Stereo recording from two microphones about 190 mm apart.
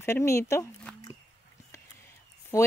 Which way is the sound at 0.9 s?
5° left (ahead or behind).